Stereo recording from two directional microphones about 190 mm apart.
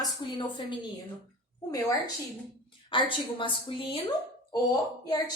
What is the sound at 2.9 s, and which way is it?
A woman's voice, 25° left (ahead or behind).